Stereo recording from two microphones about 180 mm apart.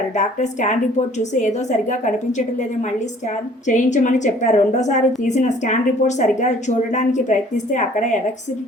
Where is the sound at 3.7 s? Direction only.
45° left (ahead or behind).